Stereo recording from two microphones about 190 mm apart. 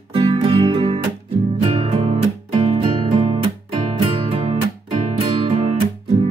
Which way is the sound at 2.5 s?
30° right (ahead or behind).